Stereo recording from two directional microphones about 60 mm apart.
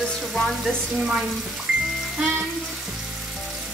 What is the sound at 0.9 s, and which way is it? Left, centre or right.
Frying, centre.